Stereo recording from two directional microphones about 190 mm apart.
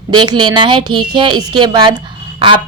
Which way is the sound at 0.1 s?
25° right (ahead or behind).